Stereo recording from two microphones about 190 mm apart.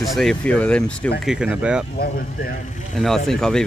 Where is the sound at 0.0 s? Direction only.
Centre (ahead or behind).